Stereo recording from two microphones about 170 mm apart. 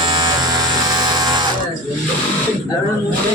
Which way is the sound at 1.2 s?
25° right (ahead or behind).